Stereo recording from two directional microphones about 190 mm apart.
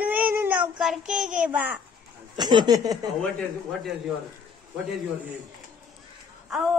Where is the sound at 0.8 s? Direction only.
Centre (ahead or behind).